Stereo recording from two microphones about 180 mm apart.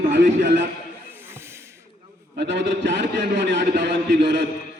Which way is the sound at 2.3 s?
75° right (ahead or behind).